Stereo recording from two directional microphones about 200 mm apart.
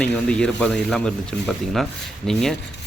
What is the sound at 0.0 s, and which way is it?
Speech, 5° left (ahead or behind).